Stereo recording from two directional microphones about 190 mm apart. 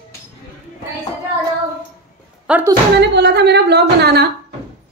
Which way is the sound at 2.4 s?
5° right (ahead or behind).